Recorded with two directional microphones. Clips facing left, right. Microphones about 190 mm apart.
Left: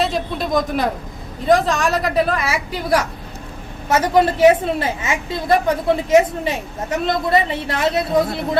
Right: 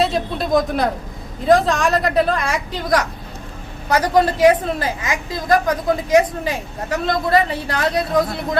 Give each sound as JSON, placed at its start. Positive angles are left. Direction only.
{"t": 0.0, "sound": "a woman's voice", "side_deg": 0}
{"t": 3.8, "sound": "a woman's voice", "side_deg": 25}